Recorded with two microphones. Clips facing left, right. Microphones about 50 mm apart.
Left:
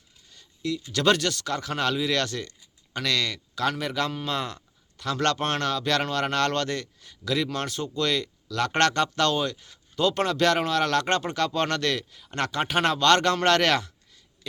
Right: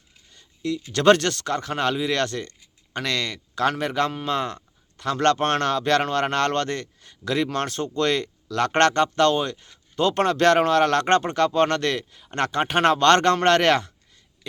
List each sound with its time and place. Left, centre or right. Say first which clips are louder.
0.3 s speech: right 2 dB; right